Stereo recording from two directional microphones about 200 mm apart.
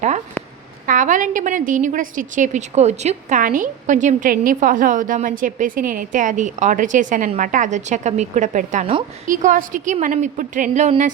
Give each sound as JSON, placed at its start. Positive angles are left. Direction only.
{"t": 0.9, "sound": "a woman's voice", "side_deg": -40}